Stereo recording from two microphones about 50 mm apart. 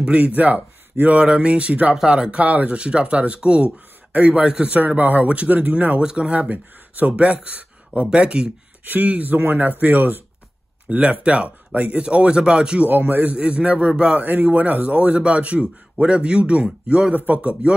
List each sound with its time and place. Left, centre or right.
0.0 s a man's voice: right
1.2 s speech: right
4.7 s speech: right
5.9 s speech: right
6.5 s speech: right
7.2 s speech: right
8.8 s speech: right
10.9 s speech: right
12.8 s speech: right
14.2 s speech: right